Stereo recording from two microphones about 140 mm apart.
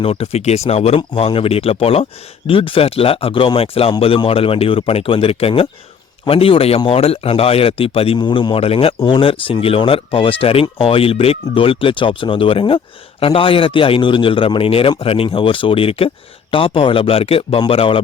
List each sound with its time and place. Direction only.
0.0 s a man's voice: 45° left (ahead or behind)